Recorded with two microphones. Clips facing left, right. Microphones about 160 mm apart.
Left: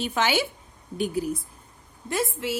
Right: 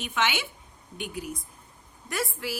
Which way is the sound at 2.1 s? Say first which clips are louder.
Left 5 dB; 25° left (ahead or behind).